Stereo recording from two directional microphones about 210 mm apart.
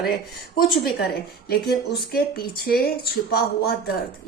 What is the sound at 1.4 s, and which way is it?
A woman's voice, 50° left (ahead or behind).